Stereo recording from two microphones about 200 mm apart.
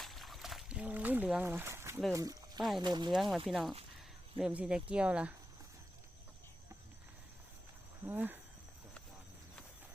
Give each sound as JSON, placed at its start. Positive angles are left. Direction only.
{"t": 0.0, "sound": "a sound", "side_deg": 0}
{"t": 2.1, "sound": "cricket", "side_deg": -20}
{"t": 2.6, "sound": "speech", "side_deg": 0}
{"t": 2.8, "sound": "speech", "side_deg": -20}
{"t": 3.1, "sound": "speech", "side_deg": 0}
{"t": 8.0, "sound": "cricket", "side_deg": -10}